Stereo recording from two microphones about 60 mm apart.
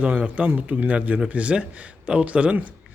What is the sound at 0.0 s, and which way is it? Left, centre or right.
Speech, centre.